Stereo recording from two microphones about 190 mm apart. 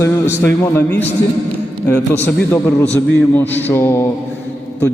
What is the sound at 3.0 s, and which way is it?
A man's voice, 10° left (ahead or behind).